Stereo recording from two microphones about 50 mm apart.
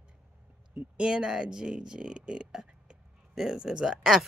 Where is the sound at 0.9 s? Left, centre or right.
Centre.